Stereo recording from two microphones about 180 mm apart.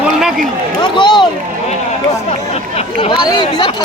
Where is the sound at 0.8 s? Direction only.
25° left (ahead or behind).